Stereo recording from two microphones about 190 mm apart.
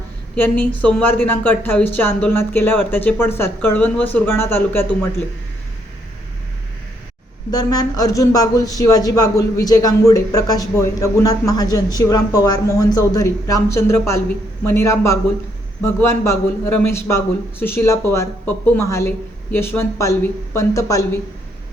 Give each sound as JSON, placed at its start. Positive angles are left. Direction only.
{"t": 0.3, "sound": "a woman's voice", "side_deg": 10}
{"t": 7.5, "sound": "a woman's voice", "side_deg": 20}